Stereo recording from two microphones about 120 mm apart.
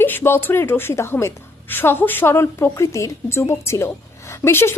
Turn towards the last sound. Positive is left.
turn(degrees=20)  # may be behind; listen again after turning